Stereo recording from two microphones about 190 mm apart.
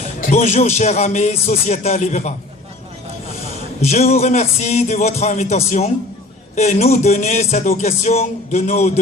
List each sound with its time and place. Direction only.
0.2 s speech: 35° left (ahead or behind)
3.8 s speech: 35° left (ahead or behind)